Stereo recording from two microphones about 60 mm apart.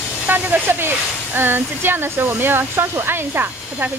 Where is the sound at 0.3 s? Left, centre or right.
Right.